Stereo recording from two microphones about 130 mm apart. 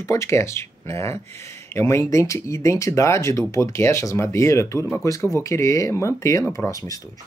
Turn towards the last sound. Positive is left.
turn(degrees=25)  # may be behind; listen again after turning